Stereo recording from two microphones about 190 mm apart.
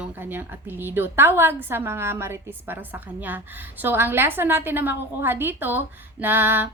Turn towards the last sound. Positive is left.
turn(degrees=-10)  # may be behind; listen again after turning